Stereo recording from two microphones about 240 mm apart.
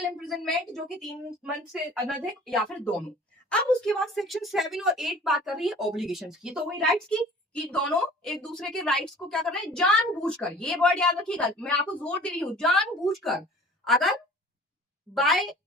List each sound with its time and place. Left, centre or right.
0.2 s a woman's voice: centre